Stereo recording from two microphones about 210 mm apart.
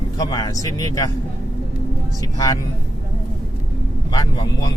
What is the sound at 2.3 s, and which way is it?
Speech, 15° left (ahead or behind).